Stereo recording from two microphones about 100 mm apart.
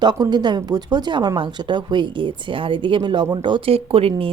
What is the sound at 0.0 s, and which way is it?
Speech, 45° right (ahead or behind).